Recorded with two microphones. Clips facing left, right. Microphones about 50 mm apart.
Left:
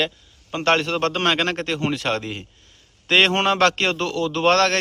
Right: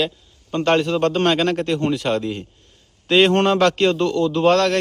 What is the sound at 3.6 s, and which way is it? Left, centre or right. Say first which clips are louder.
A man's voice: right 3 dB; left.